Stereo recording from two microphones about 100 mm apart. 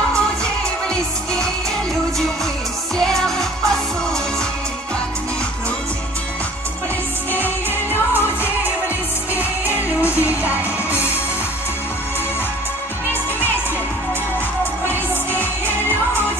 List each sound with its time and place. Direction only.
3.0 s music: 5° left (ahead or behind)
7.3 s music: 20° left (ahead or behind)
10.2 s music: 15° right (ahead or behind)